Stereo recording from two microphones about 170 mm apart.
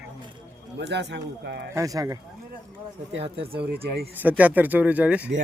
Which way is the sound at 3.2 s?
35° right (ahead or behind).